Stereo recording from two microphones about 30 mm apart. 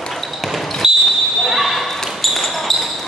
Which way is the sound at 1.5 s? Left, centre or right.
Centre.